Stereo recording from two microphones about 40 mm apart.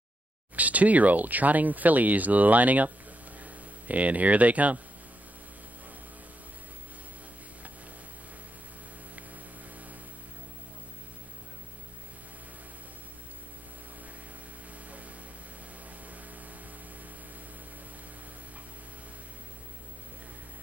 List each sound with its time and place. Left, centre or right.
0.6 s speech: right